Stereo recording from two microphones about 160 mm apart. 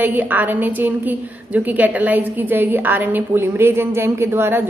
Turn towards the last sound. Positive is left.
turn(degrees=-15)  # may be behind; listen again after turning